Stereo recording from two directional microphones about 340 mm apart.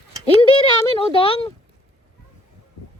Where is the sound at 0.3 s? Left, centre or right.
Centre.